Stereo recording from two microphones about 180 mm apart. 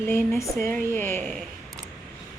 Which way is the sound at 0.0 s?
15° left (ahead or behind).